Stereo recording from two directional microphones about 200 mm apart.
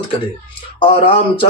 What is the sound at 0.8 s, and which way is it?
Speech, 25° left (ahead or behind).